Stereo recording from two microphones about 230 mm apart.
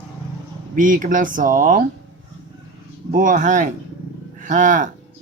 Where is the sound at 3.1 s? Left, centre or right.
Right.